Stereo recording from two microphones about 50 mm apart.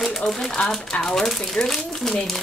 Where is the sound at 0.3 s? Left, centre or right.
Centre.